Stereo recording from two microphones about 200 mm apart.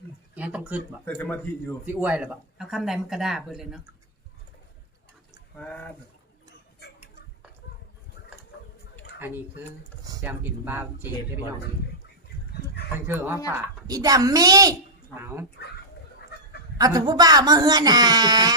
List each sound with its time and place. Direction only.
0.3 s speech: 5° right (ahead or behind)
1.0 s speech: 10° left (ahead or behind)
1.8 s speech: 5° right (ahead or behind)
5.5 s speech: 5° left (ahead or behind)
9.1 s speech: 10° right (ahead or behind)
13.1 s speech: 10° right (ahead or behind)
16.7 s speech: 20° right (ahead or behind)